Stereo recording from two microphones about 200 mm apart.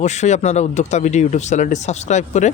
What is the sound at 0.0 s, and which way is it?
Speech, 35° left (ahead or behind).